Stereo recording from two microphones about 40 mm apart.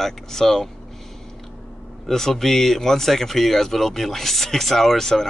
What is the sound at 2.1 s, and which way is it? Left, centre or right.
Speech, centre.